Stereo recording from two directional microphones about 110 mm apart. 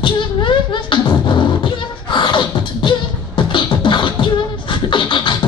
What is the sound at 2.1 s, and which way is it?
Beatboxing, 45° left (ahead or behind).